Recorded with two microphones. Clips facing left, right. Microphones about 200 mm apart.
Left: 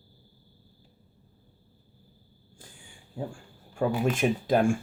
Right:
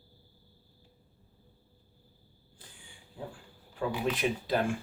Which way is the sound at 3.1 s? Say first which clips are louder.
Left 7 dB; 45° left (ahead or behind).